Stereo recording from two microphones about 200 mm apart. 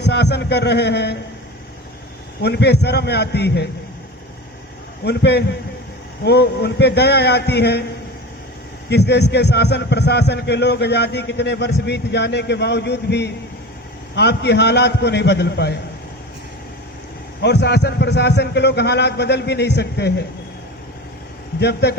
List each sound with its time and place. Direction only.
0.0 s a man's voice: 55° left (ahead or behind)
2.4 s a man's voice: 55° left (ahead or behind)
5.0 s a man's voice: 55° left (ahead or behind)
8.9 s a man's voice: 55° left (ahead or behind)
17.4 s a man's voice: 60° left (ahead or behind)
21.6 s a man's voice: 55° left (ahead or behind)